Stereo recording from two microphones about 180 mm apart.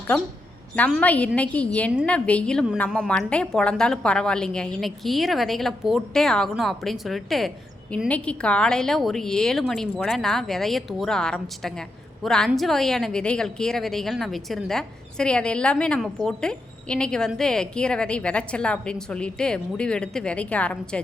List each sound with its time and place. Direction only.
0.9 s a woman's voice: 5° left (ahead or behind)